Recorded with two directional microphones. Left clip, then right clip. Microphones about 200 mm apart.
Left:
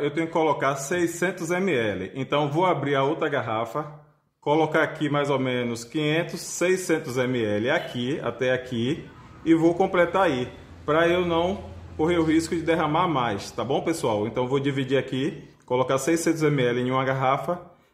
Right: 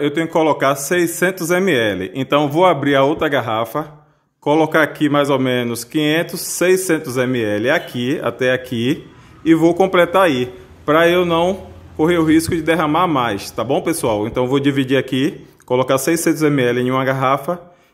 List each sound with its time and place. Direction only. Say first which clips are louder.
0.0 s a man's voice: right 7 dB; 45° right (ahead or behind)